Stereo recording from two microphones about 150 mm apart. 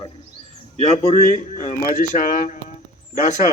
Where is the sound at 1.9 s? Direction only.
65° left (ahead or behind).